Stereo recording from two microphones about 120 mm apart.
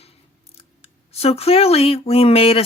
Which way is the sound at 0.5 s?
55° left (ahead or behind).